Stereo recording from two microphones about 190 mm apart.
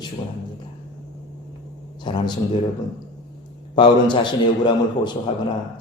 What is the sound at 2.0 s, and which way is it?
Speech, 25° left (ahead or behind).